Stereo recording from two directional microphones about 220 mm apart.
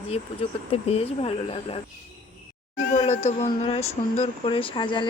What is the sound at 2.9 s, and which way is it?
Speech, 30° left (ahead or behind).